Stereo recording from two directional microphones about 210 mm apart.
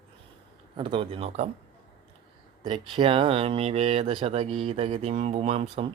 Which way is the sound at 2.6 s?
20° right (ahead or behind).